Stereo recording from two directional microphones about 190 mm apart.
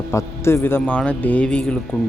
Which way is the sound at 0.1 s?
15° left (ahead or behind).